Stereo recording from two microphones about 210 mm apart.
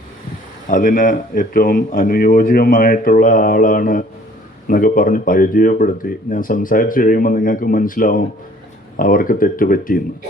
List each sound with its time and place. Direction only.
0.7 s speech: 40° left (ahead or behind)